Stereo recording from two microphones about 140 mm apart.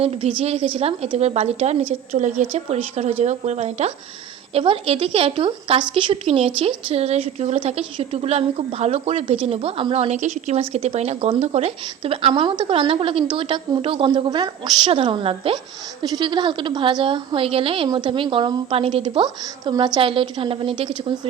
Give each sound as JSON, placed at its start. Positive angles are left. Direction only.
{"t": 0.0, "sound": "a woman's voice", "side_deg": -45}